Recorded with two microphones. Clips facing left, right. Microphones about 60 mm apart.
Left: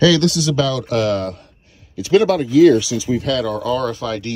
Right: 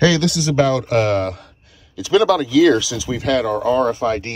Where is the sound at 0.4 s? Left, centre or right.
Right.